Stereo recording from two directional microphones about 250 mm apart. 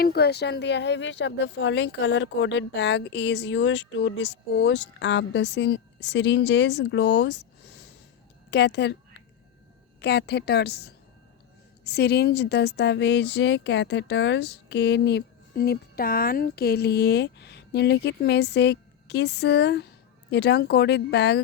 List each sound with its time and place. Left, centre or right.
0.0 s speech: left
10.0 s a woman's voice: left